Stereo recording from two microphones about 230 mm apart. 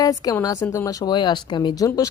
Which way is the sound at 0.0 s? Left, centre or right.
Centre.